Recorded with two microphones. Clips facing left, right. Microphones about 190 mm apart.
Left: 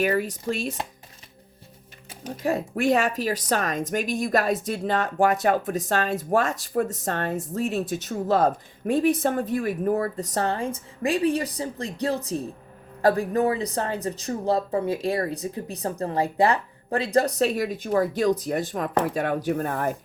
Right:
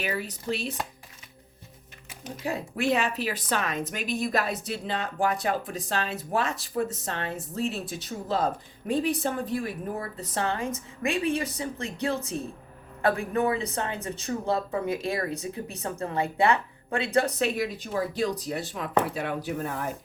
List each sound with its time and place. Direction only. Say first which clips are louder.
0.0 s speech: left 8 dB; 45° left (ahead or behind)
2.4 s speech: left 5 dB; 50° left (ahead or behind)